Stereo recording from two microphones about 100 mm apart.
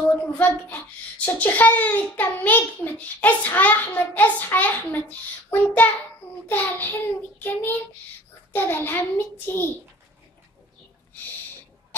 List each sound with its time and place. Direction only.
0.2 s a child's voice: 20° left (ahead or behind)
6.4 s child singing: 20° left (ahead or behind)